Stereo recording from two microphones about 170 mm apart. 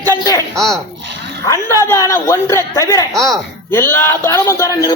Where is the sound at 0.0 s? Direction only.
20° left (ahead or behind).